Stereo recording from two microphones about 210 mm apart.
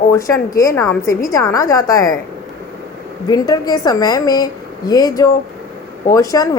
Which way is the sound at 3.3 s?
20° left (ahead or behind).